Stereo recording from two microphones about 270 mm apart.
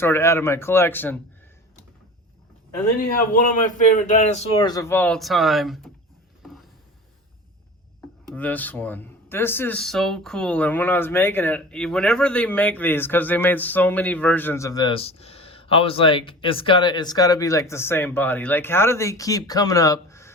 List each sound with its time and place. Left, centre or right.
0.0 s speech: centre
3.0 s a man's voice: left; by 5.9 s centre
6.4 s a sound: centre
8.4 s speech: centre